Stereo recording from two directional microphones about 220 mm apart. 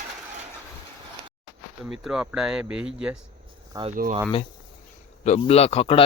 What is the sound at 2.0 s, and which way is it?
Speech, 5° right (ahead or behind).